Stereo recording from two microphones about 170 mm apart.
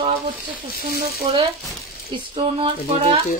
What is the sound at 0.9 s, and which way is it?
Speech, 65° right (ahead or behind).